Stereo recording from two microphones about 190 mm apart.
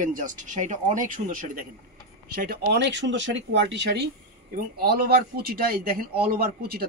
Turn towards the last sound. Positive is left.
turn(degrees=-55)  # may be behind; listen again after turning